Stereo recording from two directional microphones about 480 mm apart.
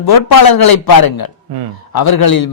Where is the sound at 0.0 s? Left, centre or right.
Left.